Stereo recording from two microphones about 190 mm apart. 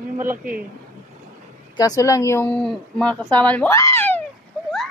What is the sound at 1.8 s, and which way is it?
Speech, 15° left (ahead or behind).